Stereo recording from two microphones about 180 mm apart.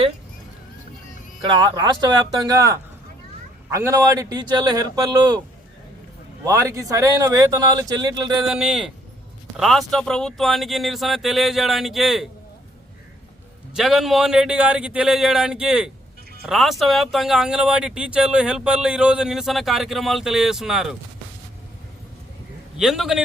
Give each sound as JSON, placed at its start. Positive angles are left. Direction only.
{"t": 1.5, "sound": "speech", "side_deg": -20}
{"t": 6.4, "sound": "speech", "side_deg": -15}
{"t": 8.4, "sound": "speech", "side_deg": -5}
{"t": 13.7, "sound": "speech", "side_deg": 0}
{"t": 22.8, "sound": "speech", "side_deg": 0}